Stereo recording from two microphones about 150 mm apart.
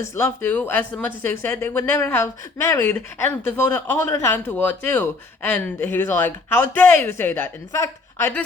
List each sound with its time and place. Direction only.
0.0 s a woman's voice: 15° left (ahead or behind)